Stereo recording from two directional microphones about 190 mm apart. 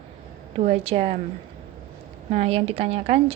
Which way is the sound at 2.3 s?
30° right (ahead or behind).